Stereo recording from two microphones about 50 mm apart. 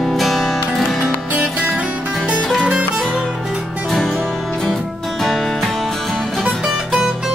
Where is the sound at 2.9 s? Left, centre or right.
Centre.